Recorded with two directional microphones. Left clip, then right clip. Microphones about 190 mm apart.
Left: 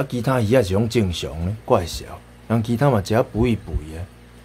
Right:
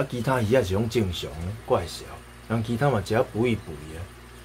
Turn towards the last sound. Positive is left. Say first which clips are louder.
# left 4 dB
turn(degrees=30)  # may be behind; listen again after turning